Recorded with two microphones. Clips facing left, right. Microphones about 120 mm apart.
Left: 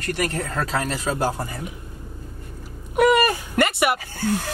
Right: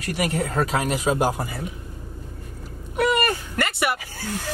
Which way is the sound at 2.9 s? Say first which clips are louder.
Left 4 dB; 15° left (ahead or behind).